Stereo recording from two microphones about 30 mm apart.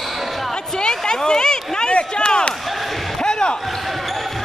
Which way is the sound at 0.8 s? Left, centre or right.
Left.